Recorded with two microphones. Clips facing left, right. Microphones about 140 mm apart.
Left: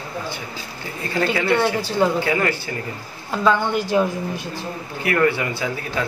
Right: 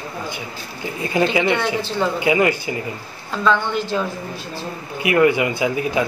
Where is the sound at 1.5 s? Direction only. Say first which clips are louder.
Left 2 dB; 10° left (ahead or behind).